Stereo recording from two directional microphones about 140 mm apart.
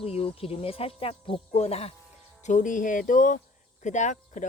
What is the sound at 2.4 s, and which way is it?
Speech, 60° left (ahead or behind).